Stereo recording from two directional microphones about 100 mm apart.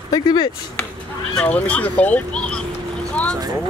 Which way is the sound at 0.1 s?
45° left (ahead or behind).